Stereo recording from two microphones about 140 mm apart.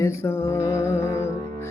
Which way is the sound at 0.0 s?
15° left (ahead or behind).